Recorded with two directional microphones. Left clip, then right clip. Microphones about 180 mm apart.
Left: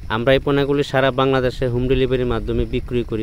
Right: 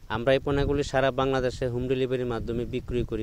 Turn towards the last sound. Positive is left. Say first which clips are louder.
# left 7 dB
turn(degrees=-40)  # may be behind; listen again after turning